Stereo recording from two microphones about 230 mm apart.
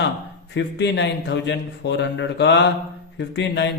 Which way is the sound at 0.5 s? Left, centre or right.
Left.